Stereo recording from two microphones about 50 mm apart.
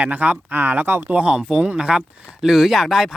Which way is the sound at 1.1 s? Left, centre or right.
Right.